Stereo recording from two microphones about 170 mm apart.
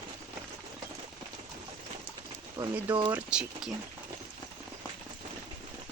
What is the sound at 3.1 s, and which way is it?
Speech, 5° right (ahead or behind).